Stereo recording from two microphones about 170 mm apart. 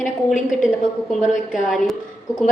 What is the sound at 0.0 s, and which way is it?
A woman's voice, 50° left (ahead or behind).